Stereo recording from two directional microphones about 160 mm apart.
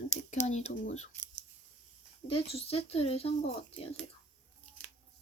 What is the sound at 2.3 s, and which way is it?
Speech, 35° left (ahead or behind).